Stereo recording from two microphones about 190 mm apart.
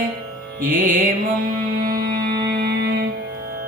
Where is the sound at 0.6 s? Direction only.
45° right (ahead or behind).